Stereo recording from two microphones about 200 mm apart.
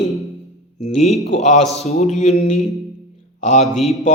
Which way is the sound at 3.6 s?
Centre (ahead or behind).